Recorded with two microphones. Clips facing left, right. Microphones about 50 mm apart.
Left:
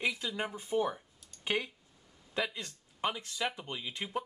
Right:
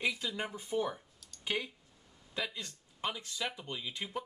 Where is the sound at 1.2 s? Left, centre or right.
Left.